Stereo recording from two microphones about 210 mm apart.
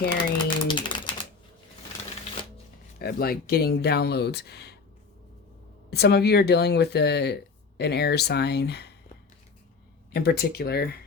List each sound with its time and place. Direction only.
0.3 s typewriter: 20° left (ahead or behind)
3.0 s speech: 45° left (ahead or behind)
5.9 s speech: 50° left (ahead or behind)
10.1 s speech: 50° left (ahead or behind)